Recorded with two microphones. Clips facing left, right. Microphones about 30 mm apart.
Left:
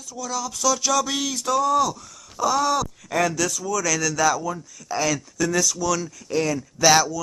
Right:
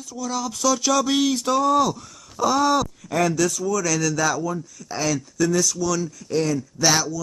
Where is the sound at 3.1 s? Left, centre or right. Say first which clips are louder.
Right 1 dB; centre.